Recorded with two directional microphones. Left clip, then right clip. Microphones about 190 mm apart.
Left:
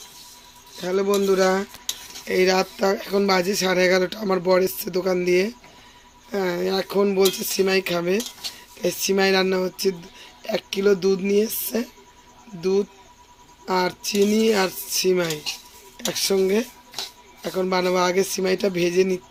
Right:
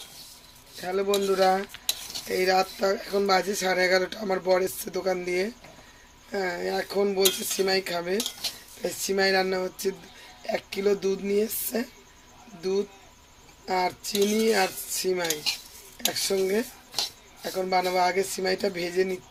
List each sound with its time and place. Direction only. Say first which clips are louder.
0.8 s speech: left 4 dB; 50° left (ahead or behind)
13.7 s speech: left 4 dB; 45° left (ahead or behind)